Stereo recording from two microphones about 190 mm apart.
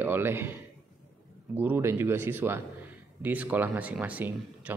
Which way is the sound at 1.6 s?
10° right (ahead or behind).